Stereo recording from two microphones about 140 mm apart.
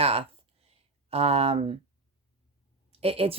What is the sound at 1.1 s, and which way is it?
Speech, 45° right (ahead or behind).